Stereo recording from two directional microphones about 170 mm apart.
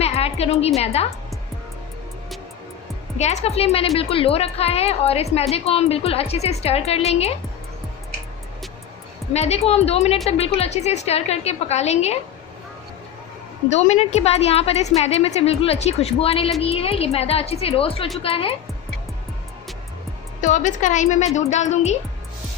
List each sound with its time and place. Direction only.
0.0 s music: 35° left (ahead or behind)
0.9 s a woman's voice: 35° left (ahead or behind)
3.2 s a woman's voice: 40° left (ahead or behind)
9.3 s a woman's voice: 40° left (ahead or behind)
13.7 s a woman's voice: 40° left (ahead or behind)
20.4 s a woman's voice: 45° left (ahead or behind)